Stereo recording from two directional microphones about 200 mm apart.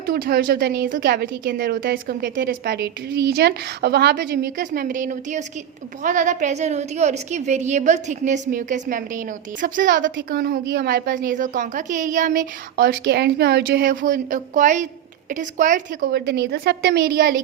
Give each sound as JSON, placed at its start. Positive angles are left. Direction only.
{"t": 0.0, "sound": "a woman's voice", "side_deg": -50}
{"t": 10.2, "sound": "a woman's voice", "side_deg": -55}